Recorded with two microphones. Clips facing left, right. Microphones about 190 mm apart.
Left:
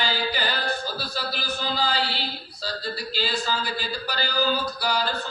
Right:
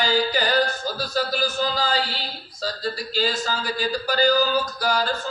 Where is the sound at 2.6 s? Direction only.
45° right (ahead or behind).